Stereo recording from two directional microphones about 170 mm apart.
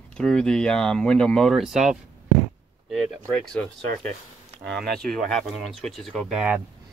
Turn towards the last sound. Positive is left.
turn(degrees=-5)  # may be behind; listen again after turning